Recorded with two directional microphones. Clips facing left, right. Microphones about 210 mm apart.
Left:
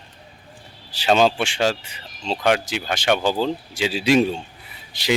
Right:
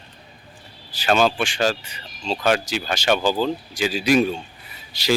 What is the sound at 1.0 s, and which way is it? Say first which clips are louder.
Speech: left 1 dB; 25° left (ahead or behind).